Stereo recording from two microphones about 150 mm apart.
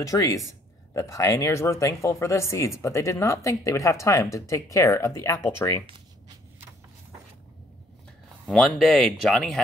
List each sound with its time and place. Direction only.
0.0 s speech: 20° left (ahead or behind)
8.5 s speech: centre (ahead or behind)